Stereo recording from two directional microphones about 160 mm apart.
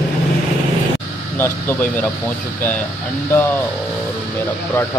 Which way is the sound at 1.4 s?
10° left (ahead or behind).